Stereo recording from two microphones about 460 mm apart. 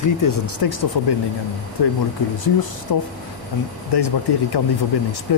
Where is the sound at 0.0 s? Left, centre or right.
Left.